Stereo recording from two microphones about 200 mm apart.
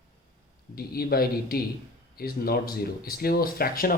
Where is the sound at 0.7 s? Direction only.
50° left (ahead or behind).